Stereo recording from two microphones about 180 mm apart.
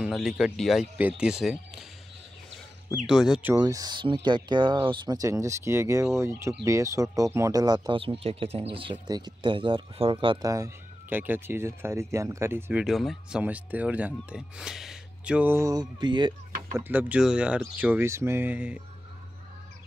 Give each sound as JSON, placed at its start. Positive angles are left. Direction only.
{"t": 0.0, "sound": "speech", "side_deg": 0}
{"t": 3.1, "sound": "speech", "side_deg": -5}
{"t": 3.5, "sound": "speech", "side_deg": -20}
{"t": 16.7, "sound": "speech", "side_deg": -10}